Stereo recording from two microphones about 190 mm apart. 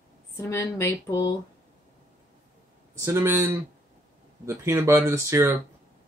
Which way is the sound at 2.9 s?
15° right (ahead or behind).